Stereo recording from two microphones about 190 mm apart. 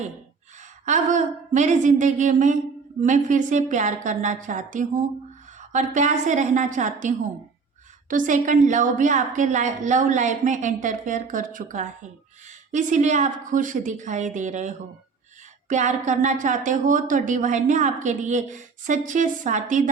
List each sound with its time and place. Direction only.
0.9 s a woman's voice: 40° right (ahead or behind)
8.1 s a woman's voice: 45° right (ahead or behind)